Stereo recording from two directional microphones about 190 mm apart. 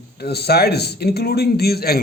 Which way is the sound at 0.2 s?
60° left (ahead or behind).